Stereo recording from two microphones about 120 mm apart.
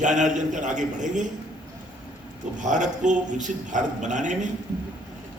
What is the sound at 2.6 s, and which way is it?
A man's voice, 90° right.